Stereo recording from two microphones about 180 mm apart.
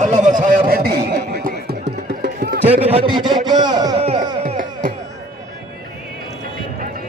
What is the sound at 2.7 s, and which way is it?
A man's voice, 35° right (ahead or behind).